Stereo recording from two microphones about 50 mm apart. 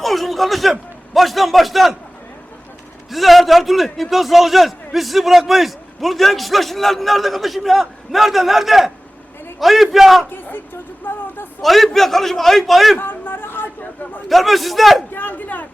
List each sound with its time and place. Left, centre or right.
0.0 s a man's voice: centre
3.1 s a man's voice: centre
11.0 s speech: left
11.6 s a man's voice: centre
13.0 s a sound: left
14.3 s a man's voice: centre
15.1 s speech: left